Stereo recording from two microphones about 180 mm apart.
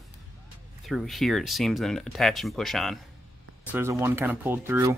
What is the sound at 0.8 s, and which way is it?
Speech, centre (ahead or behind).